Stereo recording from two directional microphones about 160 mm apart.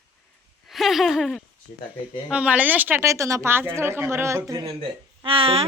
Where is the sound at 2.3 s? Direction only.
10° right (ahead or behind).